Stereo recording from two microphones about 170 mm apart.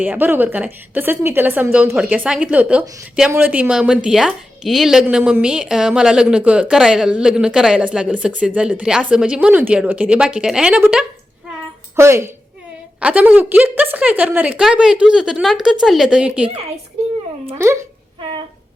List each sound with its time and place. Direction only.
0.0 s a woman's voice: 10° right (ahead or behind)
18.2 s music: 30° right (ahead or behind)